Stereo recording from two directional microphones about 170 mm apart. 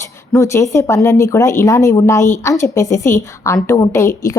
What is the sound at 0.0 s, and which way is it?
A woman's voice, 15° left (ahead or behind).